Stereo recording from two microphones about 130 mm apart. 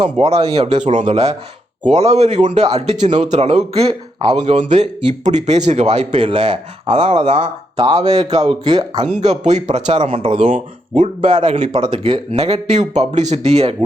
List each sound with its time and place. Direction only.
0.5 s speech: 55° right (ahead or behind)
5.2 s speech: 60° right (ahead or behind)
6.1 s speech: 45° right (ahead or behind)
8.0 s speech: 30° right (ahead or behind)
9.0 s speech: 65° right (ahead or behind)
10.2 s speech: 40° right (ahead or behind)
10.5 s speech: 65° right (ahead or behind)
11.3 s speech: 40° right (ahead or behind); by 13.7 s 55° right (ahead or behind)